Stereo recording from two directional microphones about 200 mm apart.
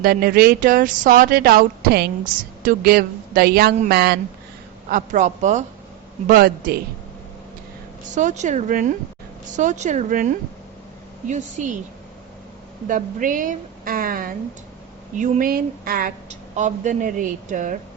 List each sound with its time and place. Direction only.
0.0 s speech: 50° right (ahead or behind)
4.9 s speech: 40° right (ahead or behind)
6.2 s speech: 50° right (ahead or behind)
8.1 s speech: 35° right (ahead or behind)
12.9 s speech: 40° right (ahead or behind)